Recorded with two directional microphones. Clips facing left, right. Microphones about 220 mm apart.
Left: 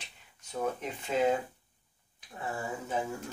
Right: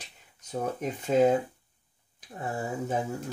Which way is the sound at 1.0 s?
40° right (ahead or behind).